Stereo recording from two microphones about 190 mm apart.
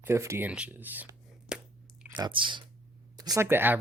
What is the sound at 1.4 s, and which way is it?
Chewing, 5° right (ahead or behind).